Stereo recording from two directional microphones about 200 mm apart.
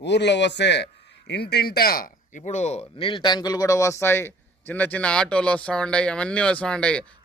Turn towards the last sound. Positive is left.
turn(degrees=5)  # may be behind; listen again after turning